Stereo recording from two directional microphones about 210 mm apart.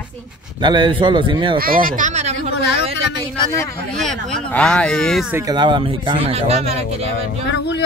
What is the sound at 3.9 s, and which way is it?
Speech, centre (ahead or behind).